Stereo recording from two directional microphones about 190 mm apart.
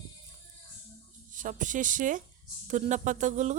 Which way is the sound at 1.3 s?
45° right (ahead or behind).